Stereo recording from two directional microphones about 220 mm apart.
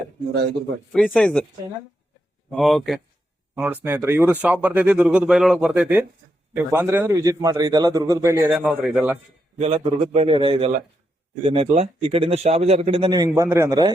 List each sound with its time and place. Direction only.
0.9 s speech: 5° left (ahead or behind)
2.5 s a man's voice: centre (ahead or behind)
9.6 s speech: 25° right (ahead or behind)